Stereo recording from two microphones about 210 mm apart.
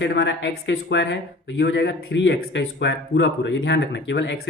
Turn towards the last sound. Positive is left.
turn(degrees=55)  # may be behind; listen again after turning